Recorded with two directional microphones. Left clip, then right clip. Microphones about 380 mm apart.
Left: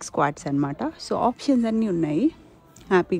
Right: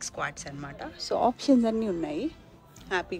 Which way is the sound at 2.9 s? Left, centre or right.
Centre.